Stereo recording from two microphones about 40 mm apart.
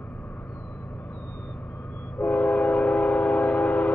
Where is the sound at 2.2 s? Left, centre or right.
Left.